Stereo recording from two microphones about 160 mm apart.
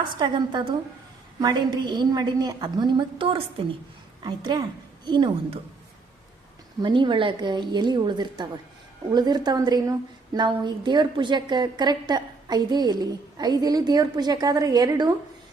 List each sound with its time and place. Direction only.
0.2 s a woman's voice: 30° right (ahead or behind)
6.8 s a woman's voice: 30° right (ahead or behind)